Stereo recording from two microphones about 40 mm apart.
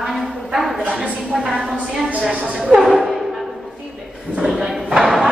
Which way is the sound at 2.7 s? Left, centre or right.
Centre.